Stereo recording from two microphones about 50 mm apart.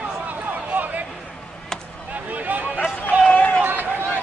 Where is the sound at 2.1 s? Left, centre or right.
Right.